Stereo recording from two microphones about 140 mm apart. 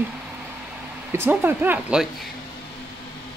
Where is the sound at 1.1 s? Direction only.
15° right (ahead or behind).